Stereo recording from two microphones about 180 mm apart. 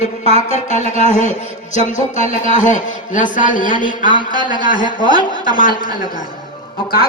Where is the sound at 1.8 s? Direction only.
40° left (ahead or behind).